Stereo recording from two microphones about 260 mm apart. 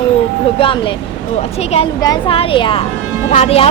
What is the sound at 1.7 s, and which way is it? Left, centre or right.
A woman's voice, left.